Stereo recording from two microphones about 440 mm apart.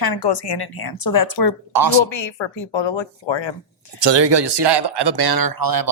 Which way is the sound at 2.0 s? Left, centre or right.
Left.